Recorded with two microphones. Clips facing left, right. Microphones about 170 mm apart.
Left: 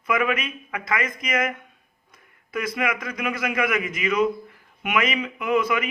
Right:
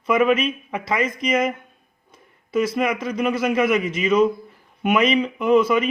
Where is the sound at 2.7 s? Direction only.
25° right (ahead or behind).